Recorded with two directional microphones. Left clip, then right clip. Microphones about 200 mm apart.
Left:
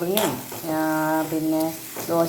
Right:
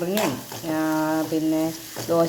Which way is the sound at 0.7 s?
25° right (ahead or behind).